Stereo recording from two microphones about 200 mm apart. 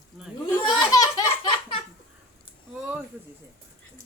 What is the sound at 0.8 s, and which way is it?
Belly laugh, 20° left (ahead or behind).